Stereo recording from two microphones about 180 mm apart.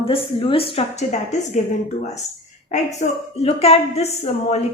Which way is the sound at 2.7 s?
40° left (ahead or behind).